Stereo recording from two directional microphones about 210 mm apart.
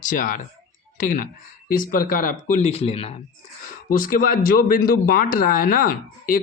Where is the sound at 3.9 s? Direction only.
40° left (ahead or behind).